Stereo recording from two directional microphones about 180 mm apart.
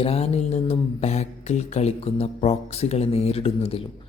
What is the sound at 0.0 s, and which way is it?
Speech, 35° left (ahead or behind).